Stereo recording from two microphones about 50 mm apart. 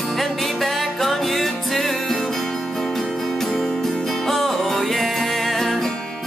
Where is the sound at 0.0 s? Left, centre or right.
Centre.